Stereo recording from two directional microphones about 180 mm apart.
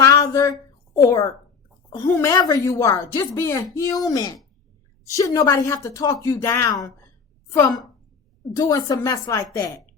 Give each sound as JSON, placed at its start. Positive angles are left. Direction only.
{"t": 0.0, "sound": "a sound", "side_deg": 20}
{"t": 2.0, "sound": "a woman's voice", "side_deg": 15}
{"t": 8.5, "sound": "speech", "side_deg": 20}